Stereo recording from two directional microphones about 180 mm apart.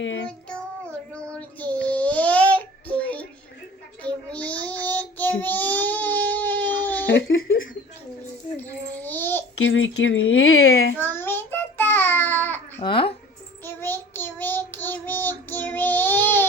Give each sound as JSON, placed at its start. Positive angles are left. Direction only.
{"t": 0.0, "sound": "child singing", "side_deg": 90}
{"t": 0.3, "sound": "child singing", "side_deg": 5}
{"t": 4.0, "sound": "child singing", "side_deg": 10}
{"t": 7.1, "sound": "speech", "side_deg": 90}
{"t": 8.5, "sound": "babbling", "side_deg": 10}
{"t": 9.6, "sound": "speech", "side_deg": 90}
{"t": 10.9, "sound": "child singing", "side_deg": 10}
{"t": 12.8, "sound": "speech", "side_deg": 30}
{"t": 13.7, "sound": "child singing", "side_deg": 10}